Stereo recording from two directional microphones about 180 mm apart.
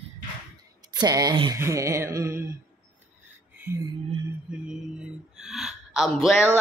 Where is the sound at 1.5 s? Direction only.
15° right (ahead or behind).